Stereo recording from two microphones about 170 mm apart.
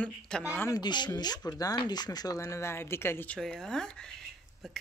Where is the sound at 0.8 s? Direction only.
25° left (ahead or behind).